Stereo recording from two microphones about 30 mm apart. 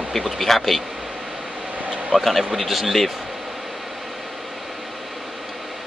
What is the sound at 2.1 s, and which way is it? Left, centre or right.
Speech, centre.